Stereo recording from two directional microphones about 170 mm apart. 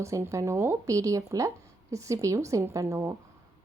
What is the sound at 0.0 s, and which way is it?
Speech, 15° right (ahead or behind).